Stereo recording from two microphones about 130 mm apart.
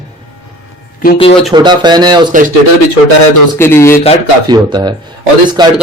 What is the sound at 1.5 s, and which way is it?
Speech, 35° right (ahead or behind).